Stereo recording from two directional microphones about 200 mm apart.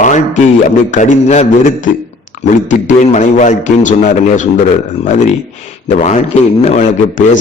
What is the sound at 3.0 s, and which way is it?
A man's voice, 40° left (ahead or behind).